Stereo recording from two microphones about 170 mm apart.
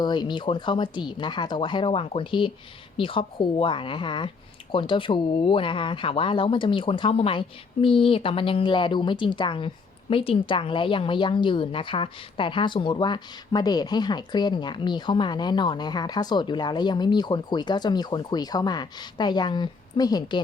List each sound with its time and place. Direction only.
0.0 s speech: 25° left (ahead or behind)